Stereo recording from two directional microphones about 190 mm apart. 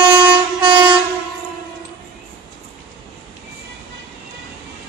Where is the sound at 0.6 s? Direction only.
25° right (ahead or behind).